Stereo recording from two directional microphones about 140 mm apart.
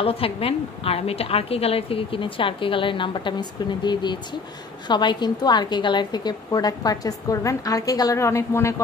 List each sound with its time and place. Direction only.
0.0 s a woman's voice: 40° left (ahead or behind); by 8.8 s 20° left (ahead or behind)